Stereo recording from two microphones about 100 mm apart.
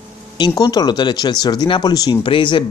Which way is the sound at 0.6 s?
40° left (ahead or behind).